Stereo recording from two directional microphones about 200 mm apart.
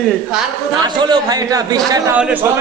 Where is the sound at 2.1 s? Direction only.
5° right (ahead or behind).